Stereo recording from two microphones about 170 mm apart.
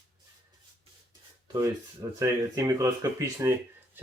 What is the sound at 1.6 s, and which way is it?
Speech, 15° right (ahead or behind).